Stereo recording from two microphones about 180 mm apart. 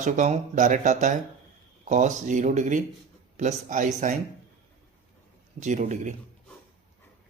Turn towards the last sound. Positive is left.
turn(degrees=-40)  # may be behind; listen again after turning